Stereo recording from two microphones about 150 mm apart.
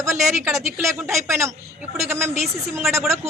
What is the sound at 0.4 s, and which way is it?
A woman's voice, 20° right (ahead or behind).